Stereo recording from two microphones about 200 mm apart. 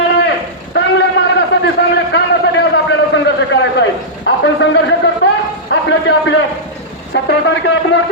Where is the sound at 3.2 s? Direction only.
60° left (ahead or behind).